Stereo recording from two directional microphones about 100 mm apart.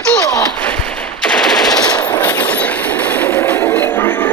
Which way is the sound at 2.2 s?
20° left (ahead or behind).